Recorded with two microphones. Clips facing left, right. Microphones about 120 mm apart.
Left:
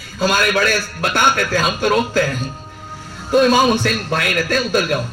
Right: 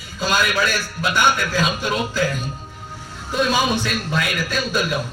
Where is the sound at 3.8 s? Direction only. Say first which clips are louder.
Left 4 dB; 65° left (ahead or behind).